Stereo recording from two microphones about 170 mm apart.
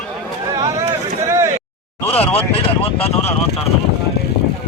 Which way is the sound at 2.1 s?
35° left (ahead or behind).